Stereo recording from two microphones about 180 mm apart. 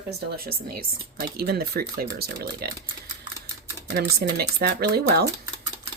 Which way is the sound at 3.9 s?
60° right (ahead or behind).